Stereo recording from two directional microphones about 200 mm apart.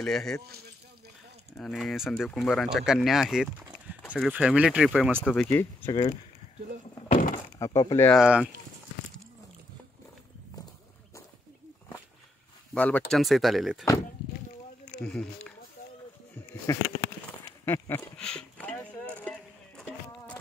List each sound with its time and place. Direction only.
0.0 s speech: centre (ahead or behind)
1.6 s speech: centre (ahead or behind)
7.1 s door: 40° left (ahead or behind)
7.5 s speech: 15° left (ahead or behind)
8.2 s speech: 5° right (ahead or behind)
12.7 s speech: 5° left (ahead or behind)
15.0 s speech: 5° left (ahead or behind)
16.7 s speech: 15° left (ahead or behind)
17.4 s a sound: 15° left (ahead or behind)